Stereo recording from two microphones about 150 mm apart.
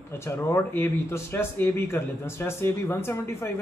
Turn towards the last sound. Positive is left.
turn(degrees=15)  # may be behind; listen again after turning